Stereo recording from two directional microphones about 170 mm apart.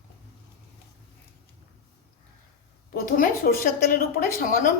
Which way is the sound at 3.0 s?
55° left (ahead or behind).